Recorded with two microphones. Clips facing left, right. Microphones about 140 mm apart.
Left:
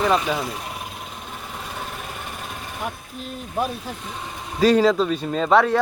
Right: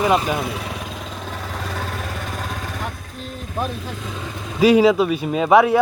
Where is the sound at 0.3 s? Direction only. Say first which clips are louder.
Right 3 dB; 70° right (ahead or behind); by 2.8 s 90° right.